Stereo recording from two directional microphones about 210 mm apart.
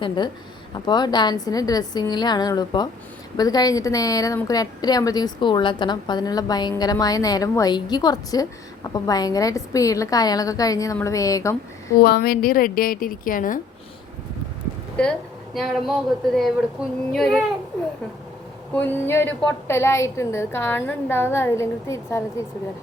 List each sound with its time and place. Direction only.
0.7 s a woman's voice: 20° left (ahead or behind)
12.0 s a woman's voice: 45° left (ahead or behind)
15.5 s a sound: centre (ahead or behind)
18.7 s a woman's voice: 10° left (ahead or behind)